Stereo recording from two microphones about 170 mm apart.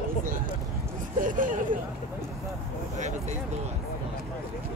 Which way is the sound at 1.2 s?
50° right (ahead or behind).